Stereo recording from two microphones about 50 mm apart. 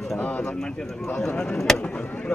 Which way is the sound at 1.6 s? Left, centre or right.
Centre.